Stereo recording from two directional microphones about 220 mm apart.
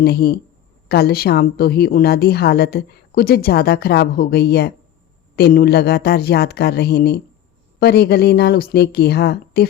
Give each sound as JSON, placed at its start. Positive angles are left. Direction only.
{"t": 0.0, "sound": "a woman's voice", "side_deg": 45}